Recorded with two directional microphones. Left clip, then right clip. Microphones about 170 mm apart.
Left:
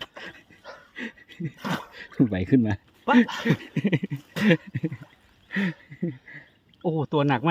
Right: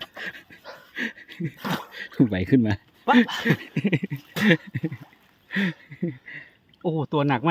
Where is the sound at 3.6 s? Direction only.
Centre (ahead or behind).